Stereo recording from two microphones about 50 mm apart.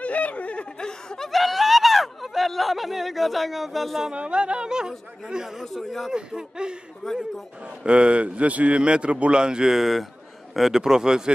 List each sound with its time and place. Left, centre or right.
0.0 s snicker: left; by 1.3 s centre
1.3 s a sound: centre
4.0 s speech: right; by 6.1 s centre
6.1 s speech: centre
7.8 s a man's voice: right